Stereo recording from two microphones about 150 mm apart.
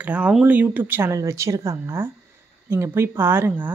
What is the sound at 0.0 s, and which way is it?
Speech, 10° right (ahead or behind).